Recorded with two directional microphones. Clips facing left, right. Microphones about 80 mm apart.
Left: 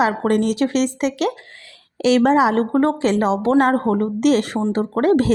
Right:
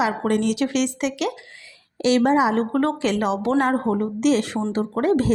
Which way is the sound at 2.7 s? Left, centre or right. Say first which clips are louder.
Left 4 dB; left.